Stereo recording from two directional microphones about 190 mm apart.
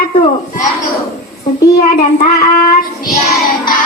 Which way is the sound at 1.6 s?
55° left (ahead or behind).